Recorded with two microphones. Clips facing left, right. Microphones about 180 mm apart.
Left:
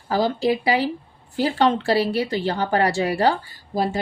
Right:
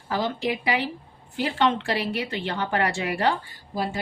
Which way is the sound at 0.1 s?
35° left (ahead or behind).